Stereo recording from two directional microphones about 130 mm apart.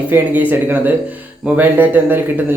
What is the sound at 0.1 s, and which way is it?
A man's voice, 15° right (ahead or behind).